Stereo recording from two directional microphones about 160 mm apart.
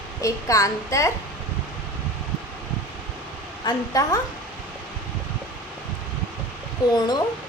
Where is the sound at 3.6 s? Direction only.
25° left (ahead or behind).